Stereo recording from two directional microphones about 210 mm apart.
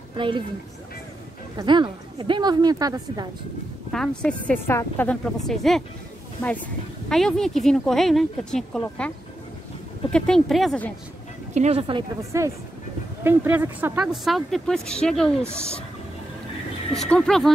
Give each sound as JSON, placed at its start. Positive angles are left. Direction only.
{"t": 1.6, "sound": "a woman's voice", "side_deg": -20}
{"t": 3.9, "sound": "speech", "side_deg": 5}
{"t": 7.1, "sound": "speech", "side_deg": 5}
{"t": 10.1, "sound": "speech", "side_deg": 5}
{"t": 11.5, "sound": "speech", "side_deg": -30}
{"t": 12.2, "sound": "a woman's voice", "side_deg": -15}
{"t": 16.9, "sound": "speech", "side_deg": 0}